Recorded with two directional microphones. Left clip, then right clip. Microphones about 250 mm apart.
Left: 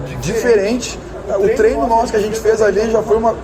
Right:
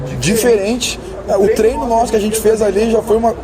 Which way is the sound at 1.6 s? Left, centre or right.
Right.